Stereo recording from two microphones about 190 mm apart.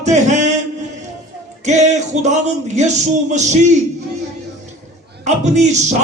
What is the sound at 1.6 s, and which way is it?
Music, 40° right (ahead or behind).